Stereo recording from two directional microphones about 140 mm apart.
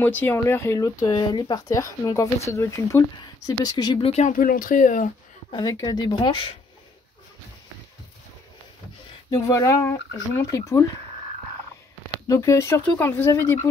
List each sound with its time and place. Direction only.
0.0 s speech: 15° left (ahead or behind); by 4.1 s 30° left (ahead or behind)
4.3 s speech: 80° left
5.5 s speech: 30° left (ahead or behind)
9.3 s speech: 25° left (ahead or behind)
12.3 s speech: 20° left (ahead or behind)